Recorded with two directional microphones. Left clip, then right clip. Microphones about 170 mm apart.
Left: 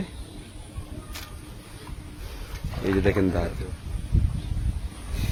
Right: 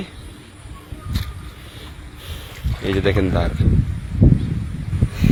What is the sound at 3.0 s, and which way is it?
Speech, 10° right (ahead or behind).